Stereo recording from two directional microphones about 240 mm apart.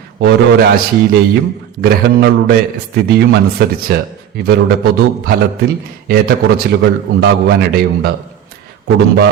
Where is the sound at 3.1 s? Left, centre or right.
Right.